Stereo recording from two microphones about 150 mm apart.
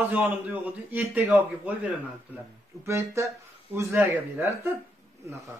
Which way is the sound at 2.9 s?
20° right (ahead or behind).